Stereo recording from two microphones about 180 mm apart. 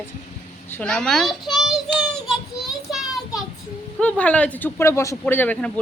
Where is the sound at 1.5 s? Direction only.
Centre (ahead or behind).